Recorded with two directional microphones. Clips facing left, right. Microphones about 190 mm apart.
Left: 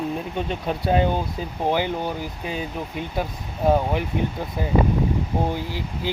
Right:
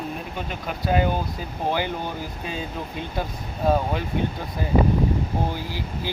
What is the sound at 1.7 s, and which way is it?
Speech, 15° left (ahead or behind).